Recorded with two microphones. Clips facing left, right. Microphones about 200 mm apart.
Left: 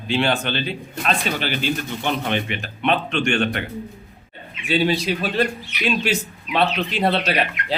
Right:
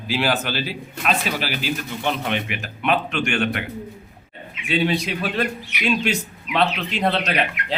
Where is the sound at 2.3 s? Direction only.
30° left (ahead or behind).